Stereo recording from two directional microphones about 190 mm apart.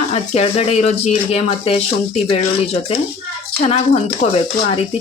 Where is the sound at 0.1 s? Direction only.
35° left (ahead or behind).